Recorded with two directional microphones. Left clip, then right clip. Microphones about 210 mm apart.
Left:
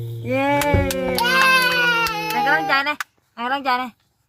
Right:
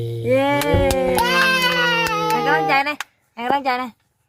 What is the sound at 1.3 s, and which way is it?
Baby cry, 25° right (ahead or behind).